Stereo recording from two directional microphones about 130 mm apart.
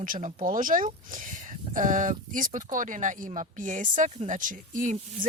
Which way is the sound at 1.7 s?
80° right.